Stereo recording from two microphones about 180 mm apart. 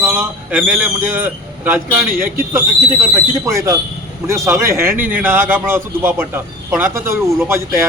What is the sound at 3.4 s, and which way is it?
A man's voice, 15° right (ahead or behind).